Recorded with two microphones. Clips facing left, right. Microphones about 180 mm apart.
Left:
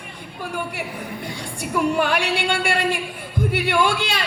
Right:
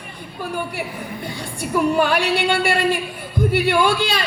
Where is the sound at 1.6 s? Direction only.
35° right (ahead or behind).